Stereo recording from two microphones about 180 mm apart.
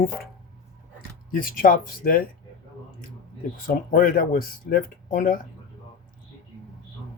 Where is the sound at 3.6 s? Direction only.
50° left (ahead or behind).